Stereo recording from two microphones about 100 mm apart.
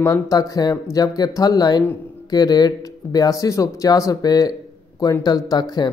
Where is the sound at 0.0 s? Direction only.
35° left (ahead or behind).